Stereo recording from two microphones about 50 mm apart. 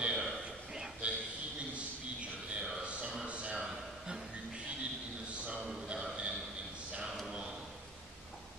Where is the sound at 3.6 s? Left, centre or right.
Centre.